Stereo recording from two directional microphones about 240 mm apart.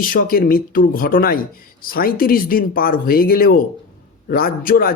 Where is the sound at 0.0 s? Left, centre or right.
Left.